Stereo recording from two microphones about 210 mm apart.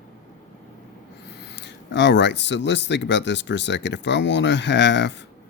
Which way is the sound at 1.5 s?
55° left (ahead or behind).